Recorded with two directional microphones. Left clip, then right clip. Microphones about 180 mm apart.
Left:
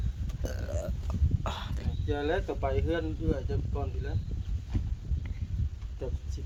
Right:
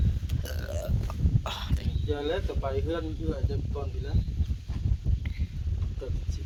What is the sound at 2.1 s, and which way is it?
Speech, 25° left (ahead or behind).